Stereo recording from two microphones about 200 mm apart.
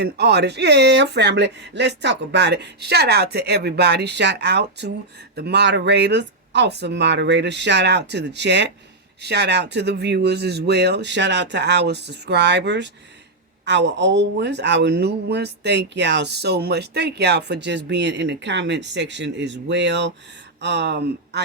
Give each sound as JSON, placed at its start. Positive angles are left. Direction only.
{"t": 0.0, "sound": "speech", "side_deg": -55}